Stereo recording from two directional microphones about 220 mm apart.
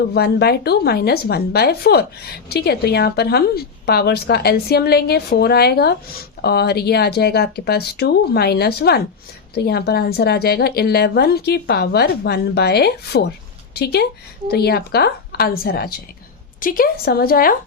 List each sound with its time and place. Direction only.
0.1 s a woman's voice: 45° left (ahead or behind)